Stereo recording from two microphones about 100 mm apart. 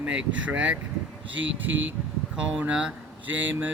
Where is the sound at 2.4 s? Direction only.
10° right (ahead or behind).